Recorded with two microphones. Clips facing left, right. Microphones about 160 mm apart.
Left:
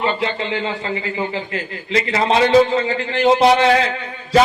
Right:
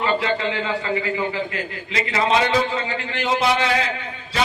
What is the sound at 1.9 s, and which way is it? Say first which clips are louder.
A man's voice: left 3 dB; 35° left (ahead or behind).